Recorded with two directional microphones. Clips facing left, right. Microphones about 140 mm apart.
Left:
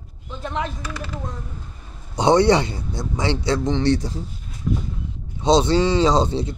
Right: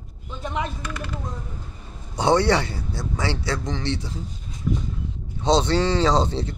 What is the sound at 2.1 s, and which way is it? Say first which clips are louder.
Speech: left 4 dB; 20° left (ahead or behind).